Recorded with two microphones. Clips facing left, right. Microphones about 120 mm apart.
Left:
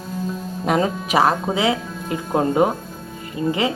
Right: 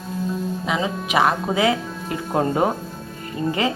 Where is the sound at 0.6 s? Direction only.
50° left (ahead or behind).